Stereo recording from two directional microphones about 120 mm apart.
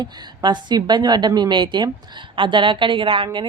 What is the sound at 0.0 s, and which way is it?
A woman's voice, 35° right (ahead or behind).